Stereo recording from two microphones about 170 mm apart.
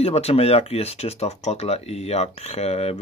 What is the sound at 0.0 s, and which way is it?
Speech, 35° left (ahead or behind).